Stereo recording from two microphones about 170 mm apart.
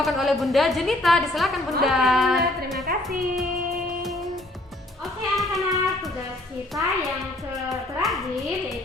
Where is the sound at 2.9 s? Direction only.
60° right (ahead or behind).